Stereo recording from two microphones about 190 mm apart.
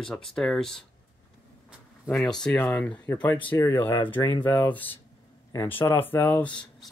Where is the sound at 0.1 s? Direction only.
Centre (ahead or behind).